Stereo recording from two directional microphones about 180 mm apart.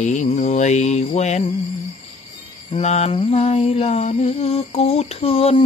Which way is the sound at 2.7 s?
35° left (ahead or behind).